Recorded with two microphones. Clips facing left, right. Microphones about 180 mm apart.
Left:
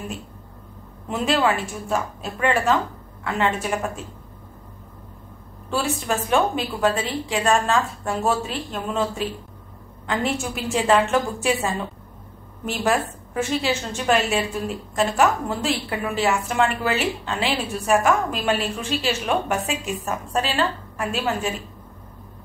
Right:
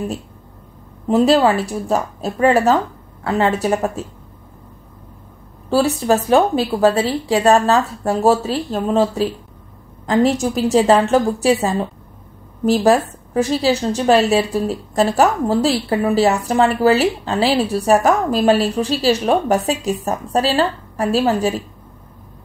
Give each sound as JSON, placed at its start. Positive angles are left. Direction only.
{"t": 1.0, "sound": "a woman's voice", "side_deg": -35}
{"t": 5.7, "sound": "a woman's voice", "side_deg": -35}